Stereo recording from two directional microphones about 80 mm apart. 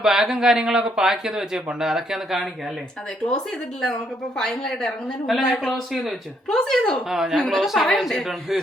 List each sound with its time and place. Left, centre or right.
0.0 s speech: centre
7.1 s speech: centre